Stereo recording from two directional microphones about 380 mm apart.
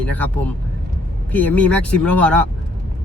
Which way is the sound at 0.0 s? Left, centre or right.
Centre.